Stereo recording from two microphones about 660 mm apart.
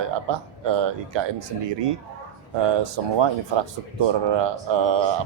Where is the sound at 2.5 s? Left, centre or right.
Right.